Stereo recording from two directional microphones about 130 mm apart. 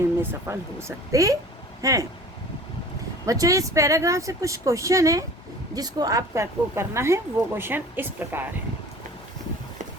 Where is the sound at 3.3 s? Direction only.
25° right (ahead or behind).